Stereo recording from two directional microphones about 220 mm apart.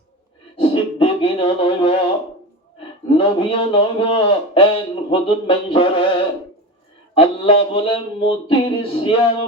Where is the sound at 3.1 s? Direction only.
25° left (ahead or behind).